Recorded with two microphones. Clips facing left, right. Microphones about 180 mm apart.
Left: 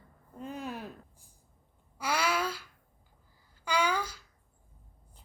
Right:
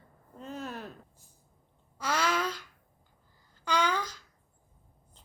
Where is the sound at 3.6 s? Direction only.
10° left (ahead or behind).